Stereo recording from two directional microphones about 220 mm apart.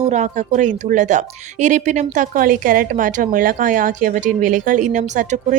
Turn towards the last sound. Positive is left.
turn(degrees=-35)  # may be behind; listen again after turning